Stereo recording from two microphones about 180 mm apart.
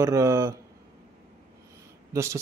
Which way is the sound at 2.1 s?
15° right (ahead or behind).